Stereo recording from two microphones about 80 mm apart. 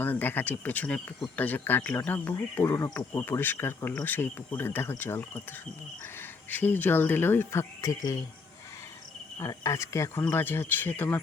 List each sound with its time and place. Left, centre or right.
0.0 s speech: left
2.9 s speech: left
9.4 s speech: left
10.2 s speech: left